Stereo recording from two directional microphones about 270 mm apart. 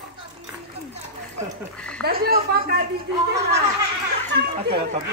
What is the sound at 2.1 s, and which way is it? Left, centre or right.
Speech, right.